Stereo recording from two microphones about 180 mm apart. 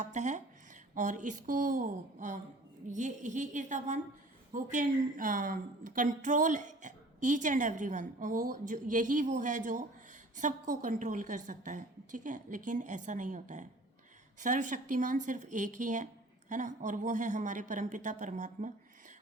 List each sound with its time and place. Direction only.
0.0 s a woman's voice: 40° right (ahead or behind)